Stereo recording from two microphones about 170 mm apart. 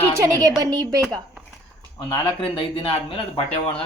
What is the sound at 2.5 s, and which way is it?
Speech, 35° left (ahead or behind).